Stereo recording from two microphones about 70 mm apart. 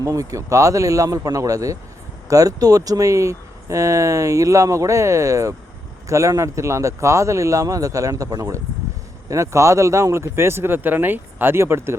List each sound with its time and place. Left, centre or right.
0.0 s speech: right